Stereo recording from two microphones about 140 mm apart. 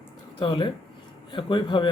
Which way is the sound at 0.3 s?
35° left (ahead or behind).